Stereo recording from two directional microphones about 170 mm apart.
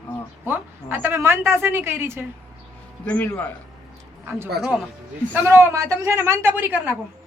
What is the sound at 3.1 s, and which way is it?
Speech, 10° left (ahead or behind).